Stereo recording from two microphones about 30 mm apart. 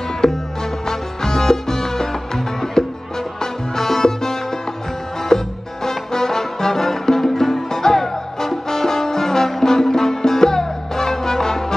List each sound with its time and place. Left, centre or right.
0.2 s music: left
3.7 s salsa music: centre
5.3 s music: centre